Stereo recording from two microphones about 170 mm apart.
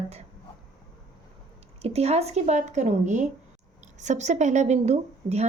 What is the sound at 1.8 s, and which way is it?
A woman's voice, 35° right (ahead or behind).